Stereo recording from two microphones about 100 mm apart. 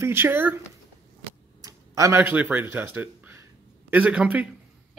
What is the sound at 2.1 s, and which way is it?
Speech, 20° right (ahead or behind).